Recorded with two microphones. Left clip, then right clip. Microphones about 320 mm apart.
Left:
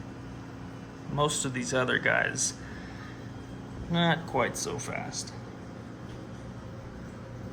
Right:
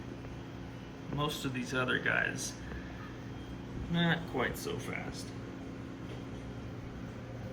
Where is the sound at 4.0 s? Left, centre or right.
Centre.